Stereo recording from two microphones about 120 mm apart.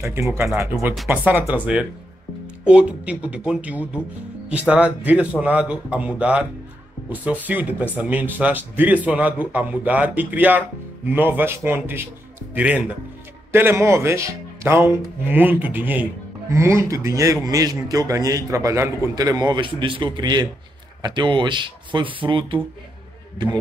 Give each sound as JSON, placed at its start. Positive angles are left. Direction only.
{"t": 0.0, "sound": "a man's voice", "side_deg": -25}